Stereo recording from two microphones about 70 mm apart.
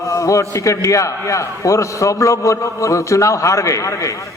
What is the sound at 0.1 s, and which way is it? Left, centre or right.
A man's voice, left.